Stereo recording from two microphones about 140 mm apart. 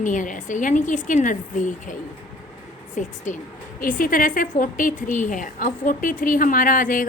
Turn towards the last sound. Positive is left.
turn(degrees=75)  # may be behind; listen again after turning